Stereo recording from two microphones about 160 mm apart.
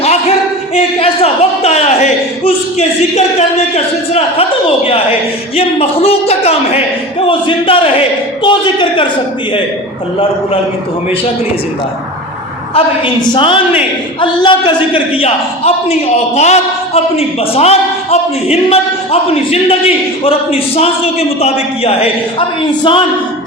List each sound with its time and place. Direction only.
0.0 s a sound: 40° left (ahead or behind)
5.5 s a man's voice: 40° left (ahead or behind)
12.7 s a man's voice: 30° left (ahead or behind)